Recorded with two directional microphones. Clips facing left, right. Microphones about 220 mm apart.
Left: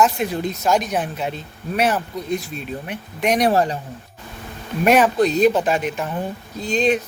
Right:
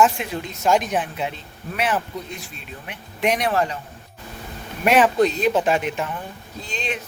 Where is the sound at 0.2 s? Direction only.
40° left (ahead or behind).